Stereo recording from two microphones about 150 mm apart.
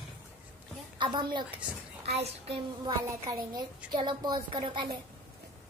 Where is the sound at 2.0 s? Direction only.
45° right (ahead or behind).